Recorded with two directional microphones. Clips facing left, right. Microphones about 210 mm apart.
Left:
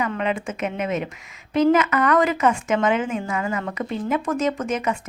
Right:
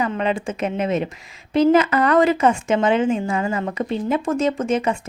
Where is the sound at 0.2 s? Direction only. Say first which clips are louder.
Right 3 dB; 30° right (ahead or behind).